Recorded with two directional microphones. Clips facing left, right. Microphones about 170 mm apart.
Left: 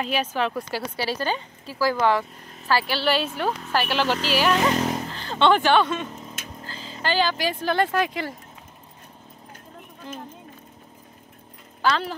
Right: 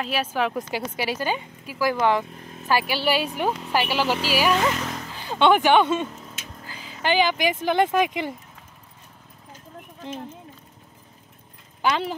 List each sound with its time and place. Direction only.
0.0 s speech: 5° right (ahead or behind)
4.6 s speech: 30° left (ahead or behind)
5.1 s speech: 10° right (ahead or behind)
11.8 s speech: 15° right (ahead or behind)